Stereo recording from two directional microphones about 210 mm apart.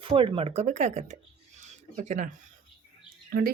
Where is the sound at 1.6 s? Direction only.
35° right (ahead or behind).